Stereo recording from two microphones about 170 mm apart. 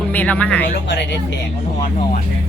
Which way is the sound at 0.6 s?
90° left.